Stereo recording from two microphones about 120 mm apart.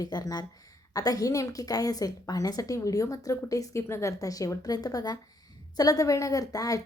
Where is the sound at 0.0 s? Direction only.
30° left (ahead or behind).